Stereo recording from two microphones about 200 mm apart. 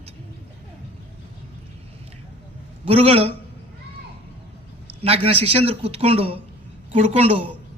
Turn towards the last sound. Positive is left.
turn(degrees=-30)  # may be behind; listen again after turning